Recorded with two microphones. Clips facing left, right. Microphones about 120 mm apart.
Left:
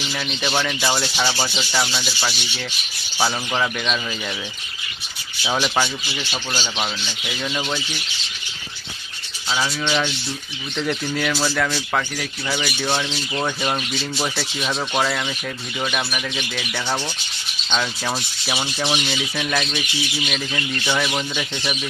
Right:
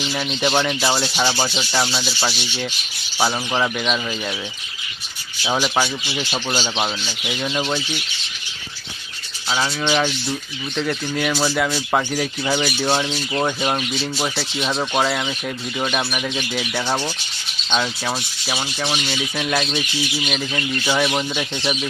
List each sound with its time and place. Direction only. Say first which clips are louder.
0.3 s speech: right 4 dB; 20° right (ahead or behind)
5.5 s speech: right 1 dB; 10° right (ahead or behind)
9.5 s a sound: right 1 dB; centre (ahead or behind)
9.8 s speech: right 3 dB; 10° right (ahead or behind)
17.7 s a sound: right 1 dB; 5° right (ahead or behind)
19.5 s speech: right 4 dB; 15° right (ahead or behind)